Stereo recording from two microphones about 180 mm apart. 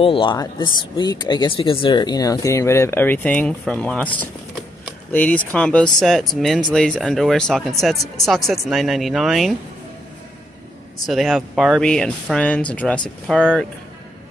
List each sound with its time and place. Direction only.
0.0 s speech: 30° left (ahead or behind); by 9.6 s centre (ahead or behind)
11.1 s speech: centre (ahead or behind)